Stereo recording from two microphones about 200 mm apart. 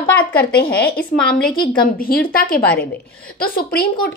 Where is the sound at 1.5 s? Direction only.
45° left (ahead or behind).